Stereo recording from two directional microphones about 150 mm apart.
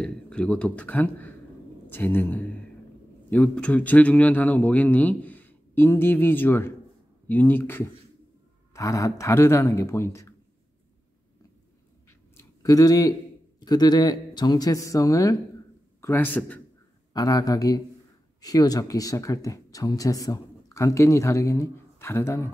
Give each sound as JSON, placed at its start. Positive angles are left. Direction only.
{"t": 0.0, "sound": "a man's voice", "side_deg": 5}
{"t": 12.6, "sound": "a man's voice", "side_deg": 25}
{"t": 17.1, "sound": "speech", "side_deg": 25}